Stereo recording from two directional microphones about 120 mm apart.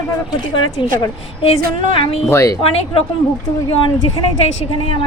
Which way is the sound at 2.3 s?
25° left (ahead or behind).